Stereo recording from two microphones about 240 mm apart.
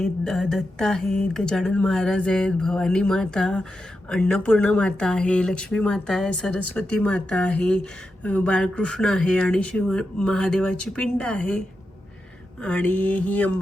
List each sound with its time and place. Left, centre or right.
0.0 s speech: centre
12.6 s mantra: centre